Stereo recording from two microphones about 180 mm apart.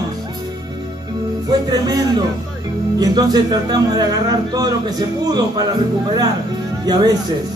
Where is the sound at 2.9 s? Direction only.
20° right (ahead or behind).